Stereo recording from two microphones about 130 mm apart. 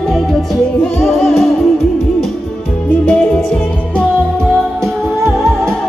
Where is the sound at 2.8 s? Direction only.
10° left (ahead or behind).